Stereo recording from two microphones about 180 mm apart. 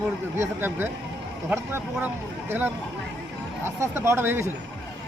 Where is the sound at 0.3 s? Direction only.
10° right (ahead or behind).